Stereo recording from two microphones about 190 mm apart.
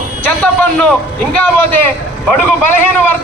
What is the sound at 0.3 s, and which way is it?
A man's voice, 5° left (ahead or behind).